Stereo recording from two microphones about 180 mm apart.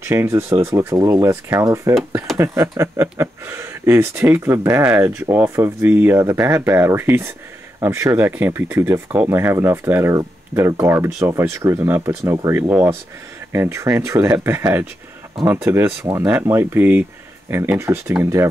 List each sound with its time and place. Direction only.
0.0 s speech: 15° right (ahead or behind)